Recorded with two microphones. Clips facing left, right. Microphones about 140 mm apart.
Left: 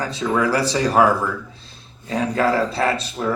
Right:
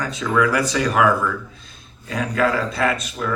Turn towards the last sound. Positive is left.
turn(degrees=30)  # may be behind; listen again after turning